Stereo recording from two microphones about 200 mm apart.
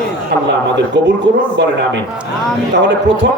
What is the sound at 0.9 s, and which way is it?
Speech, 60° right (ahead or behind).